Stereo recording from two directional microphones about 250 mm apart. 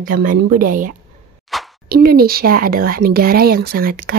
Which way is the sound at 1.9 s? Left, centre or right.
Right.